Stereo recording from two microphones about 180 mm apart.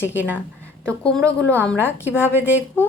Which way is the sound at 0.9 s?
5° left (ahead or behind).